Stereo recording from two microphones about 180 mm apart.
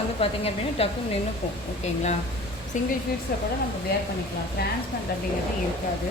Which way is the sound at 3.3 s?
55° left (ahead or behind).